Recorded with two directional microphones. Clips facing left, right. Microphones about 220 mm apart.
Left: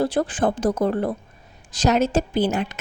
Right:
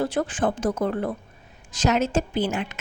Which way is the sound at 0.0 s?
35° left (ahead or behind).